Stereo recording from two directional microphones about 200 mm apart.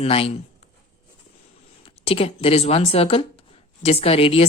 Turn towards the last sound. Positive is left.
turn(degrees=30)  # may be behind; listen again after turning